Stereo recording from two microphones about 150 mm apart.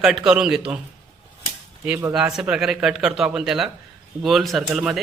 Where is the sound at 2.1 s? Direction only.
5° right (ahead or behind).